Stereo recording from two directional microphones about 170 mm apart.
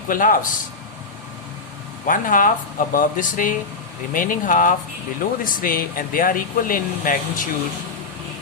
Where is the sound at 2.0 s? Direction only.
55° left (ahead or behind).